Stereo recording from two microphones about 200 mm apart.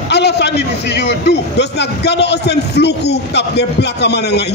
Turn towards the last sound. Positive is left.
turn(degrees=55)  # may be behind; listen again after turning